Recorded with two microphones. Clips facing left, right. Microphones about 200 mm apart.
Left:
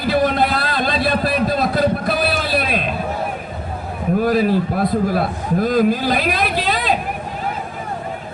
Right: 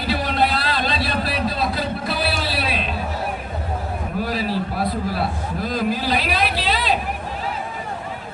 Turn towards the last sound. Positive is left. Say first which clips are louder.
# left 3 dB
turn(degrees=50)  # may be behind; listen again after turning